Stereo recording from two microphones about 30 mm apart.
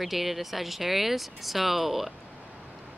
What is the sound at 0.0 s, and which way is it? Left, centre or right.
Speech, centre.